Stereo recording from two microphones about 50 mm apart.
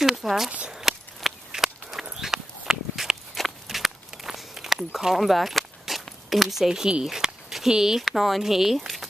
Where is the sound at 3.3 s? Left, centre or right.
Centre.